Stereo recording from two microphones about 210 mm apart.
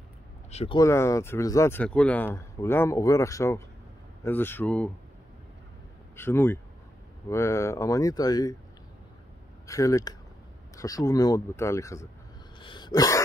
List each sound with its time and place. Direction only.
0.5 s speech: 30° left (ahead or behind)
0.7 s speech: 15° left (ahead or behind)
6.1 s speech: 10° left (ahead or behind)
9.7 s speech: 15° left (ahead or behind)
12.5 s dog: 20° left (ahead or behind)